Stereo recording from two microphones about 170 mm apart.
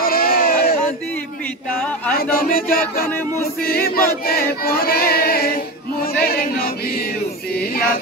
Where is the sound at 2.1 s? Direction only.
60° left (ahead or behind).